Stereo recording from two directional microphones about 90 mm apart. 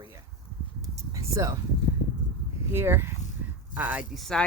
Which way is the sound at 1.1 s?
40° right (ahead or behind).